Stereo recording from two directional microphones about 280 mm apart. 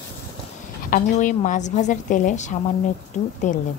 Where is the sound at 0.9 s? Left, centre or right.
Left.